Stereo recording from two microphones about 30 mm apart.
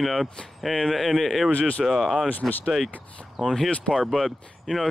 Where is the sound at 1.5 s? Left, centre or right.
Left.